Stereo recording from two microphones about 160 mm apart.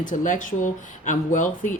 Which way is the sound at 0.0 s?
55° left (ahead or behind).